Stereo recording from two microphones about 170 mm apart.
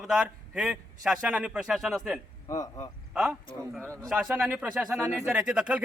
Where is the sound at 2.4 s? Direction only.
20° left (ahead or behind).